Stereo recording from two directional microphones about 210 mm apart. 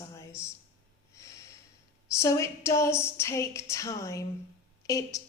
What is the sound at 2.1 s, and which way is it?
A woman's voice, 15° left (ahead or behind).